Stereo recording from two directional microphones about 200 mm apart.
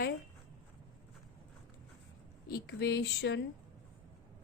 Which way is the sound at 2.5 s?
50° left (ahead or behind).